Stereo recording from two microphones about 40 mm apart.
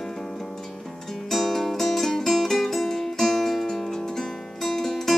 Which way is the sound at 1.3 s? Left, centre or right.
Centre.